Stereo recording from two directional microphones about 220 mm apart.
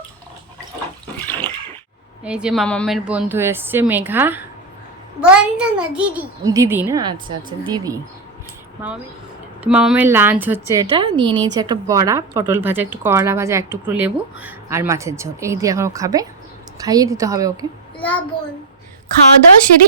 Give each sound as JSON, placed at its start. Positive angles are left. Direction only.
{"t": 1.2, "sound": "water", "side_deg": 10}
{"t": 2.2, "sound": "a woman's voice", "side_deg": -5}
{"t": 9.6, "sound": "a woman's voice", "side_deg": -5}
{"t": 10.9, "sound": "a woman's voice", "side_deg": -20}
{"t": 17.9, "sound": "child singing", "side_deg": 5}